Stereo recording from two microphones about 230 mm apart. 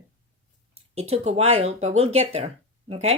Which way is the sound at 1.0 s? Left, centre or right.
Right.